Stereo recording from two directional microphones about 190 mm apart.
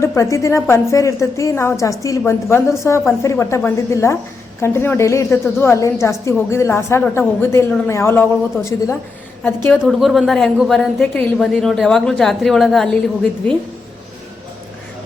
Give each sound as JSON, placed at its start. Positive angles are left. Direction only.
{"t": 0.0, "sound": "speech", "side_deg": 15}
{"t": 9.7, "sound": "a woman's voice", "side_deg": 0}